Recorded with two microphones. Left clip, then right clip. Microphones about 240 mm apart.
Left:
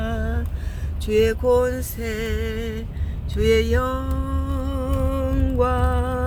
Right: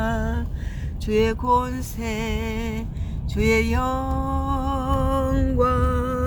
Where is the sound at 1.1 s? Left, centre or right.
Centre.